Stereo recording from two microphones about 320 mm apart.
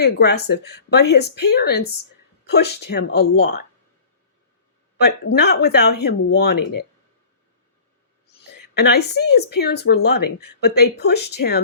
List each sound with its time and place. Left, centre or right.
0.0 s speech: left
4.9 s speech: left
8.7 s speech: left